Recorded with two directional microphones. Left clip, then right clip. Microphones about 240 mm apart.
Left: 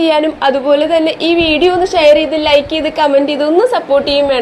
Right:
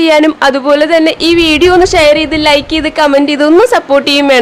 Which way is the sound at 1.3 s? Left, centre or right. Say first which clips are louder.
Right 2 dB; right.